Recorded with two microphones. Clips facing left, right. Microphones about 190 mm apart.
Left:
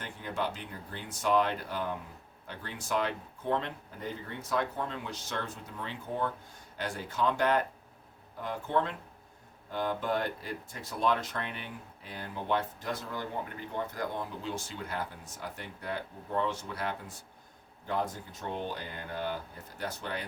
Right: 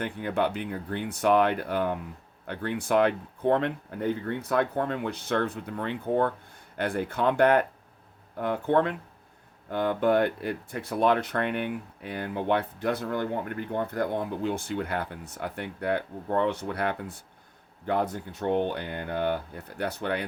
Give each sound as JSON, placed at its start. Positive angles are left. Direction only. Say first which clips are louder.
{"t": 0.0, "sound": "speech", "louder": "right 8 dB", "side_deg": -60}